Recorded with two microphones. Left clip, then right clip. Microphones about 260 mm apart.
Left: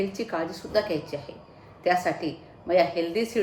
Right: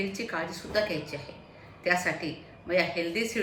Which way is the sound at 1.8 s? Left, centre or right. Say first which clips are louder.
Left 3 dB; centre.